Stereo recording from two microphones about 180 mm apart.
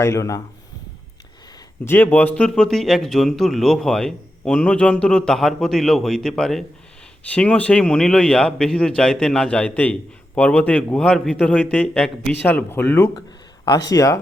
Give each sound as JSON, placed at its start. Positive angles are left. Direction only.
{"t": 0.0, "sound": "speech", "side_deg": 15}
{"t": 1.8, "sound": "a man's voice", "side_deg": 10}